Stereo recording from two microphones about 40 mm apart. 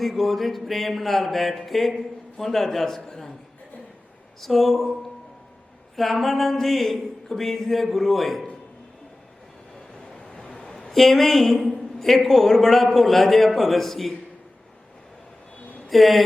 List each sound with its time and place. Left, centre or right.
0.0 s a man's voice: centre
4.4 s a man's voice: centre
6.0 s a man's voice: centre
10.2 s vehicle: centre
10.9 s a man's voice: centre
15.9 s a man's voice: centre